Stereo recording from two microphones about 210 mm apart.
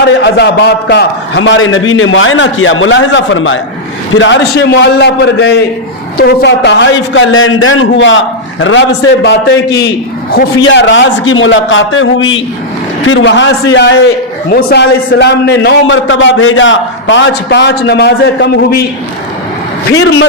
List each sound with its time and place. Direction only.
0.2 s a man's voice: 55° left (ahead or behind)
19.9 s a man's voice: 55° left (ahead or behind)